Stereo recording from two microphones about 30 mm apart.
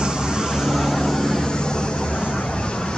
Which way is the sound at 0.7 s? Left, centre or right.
Centre.